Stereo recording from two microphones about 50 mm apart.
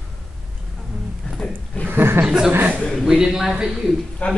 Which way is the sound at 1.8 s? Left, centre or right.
Right.